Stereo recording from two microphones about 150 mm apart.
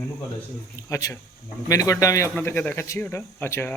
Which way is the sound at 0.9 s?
20° left (ahead or behind).